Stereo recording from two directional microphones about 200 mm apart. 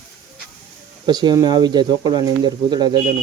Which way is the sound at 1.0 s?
20° right (ahead or behind).